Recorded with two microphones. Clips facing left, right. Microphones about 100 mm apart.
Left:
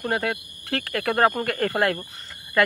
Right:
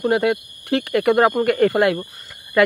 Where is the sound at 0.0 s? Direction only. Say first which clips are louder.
Right 8 dB; 20° right (ahead or behind).